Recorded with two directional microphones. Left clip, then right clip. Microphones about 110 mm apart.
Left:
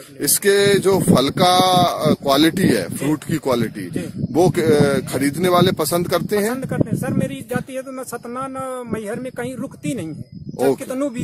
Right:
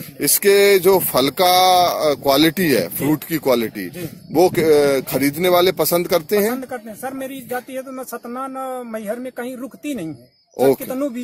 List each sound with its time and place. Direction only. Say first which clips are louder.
0.2 s speech: right 2 dB; 5° right (ahead or behind)
6.6 s speech: left 4 dB; 35° left (ahead or behind)